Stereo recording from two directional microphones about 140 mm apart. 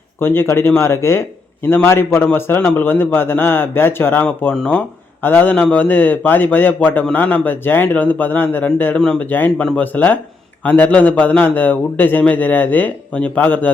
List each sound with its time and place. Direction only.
0.2 s a man's voice: 15° left (ahead or behind)